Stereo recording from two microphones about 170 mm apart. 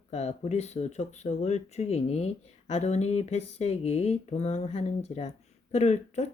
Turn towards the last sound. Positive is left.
turn(degrees=40)  # may be behind; listen again after turning